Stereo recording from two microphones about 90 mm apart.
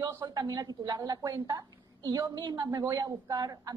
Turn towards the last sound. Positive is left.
turn(degrees=-45)  # may be behind; listen again after turning